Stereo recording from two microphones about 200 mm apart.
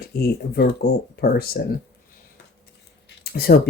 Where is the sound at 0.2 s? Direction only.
55° left (ahead or behind).